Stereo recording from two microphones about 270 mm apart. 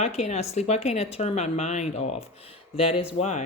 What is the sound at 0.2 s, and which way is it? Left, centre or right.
Speech, left.